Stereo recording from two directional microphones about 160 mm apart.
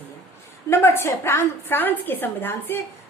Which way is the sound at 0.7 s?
15° left (ahead or behind).